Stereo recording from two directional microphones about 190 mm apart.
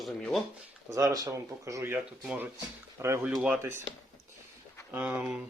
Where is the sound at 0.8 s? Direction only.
20° right (ahead or behind).